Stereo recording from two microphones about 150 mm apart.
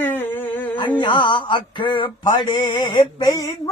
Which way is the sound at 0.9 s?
30° left (ahead or behind).